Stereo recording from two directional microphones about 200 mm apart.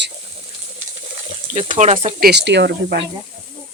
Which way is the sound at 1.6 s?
30° right (ahead or behind).